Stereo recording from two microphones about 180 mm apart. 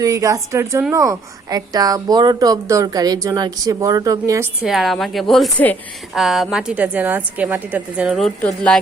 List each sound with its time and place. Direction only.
0.0 s a woman's voice: 20° right (ahead or behind)
4.6 s a woman's voice: centre (ahead or behind)